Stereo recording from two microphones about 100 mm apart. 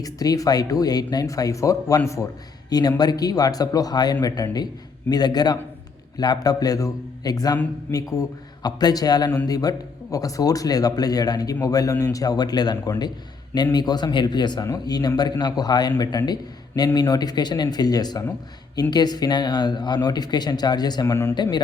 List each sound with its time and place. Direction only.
0.0 s a man's voice: 35° left (ahead or behind)